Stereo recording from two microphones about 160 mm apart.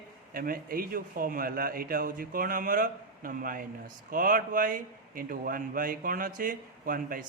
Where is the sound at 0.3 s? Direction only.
65° right (ahead or behind).